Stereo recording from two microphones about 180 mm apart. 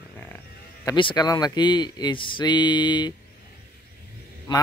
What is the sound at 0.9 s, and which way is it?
Speech, 25° left (ahead or behind).